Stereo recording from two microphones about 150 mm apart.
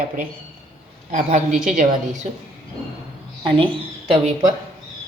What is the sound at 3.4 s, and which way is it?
Speech, 35° right (ahead or behind).